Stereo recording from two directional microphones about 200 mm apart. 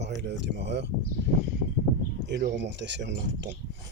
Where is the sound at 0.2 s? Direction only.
55° right (ahead or behind).